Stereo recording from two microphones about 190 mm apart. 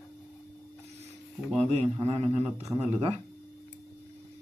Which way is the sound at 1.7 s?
30° right (ahead or behind).